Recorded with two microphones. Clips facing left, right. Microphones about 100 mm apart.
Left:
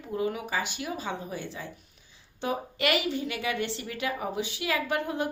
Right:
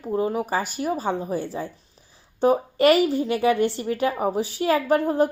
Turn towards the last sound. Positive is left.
turn(degrees=-40)  # may be behind; listen again after turning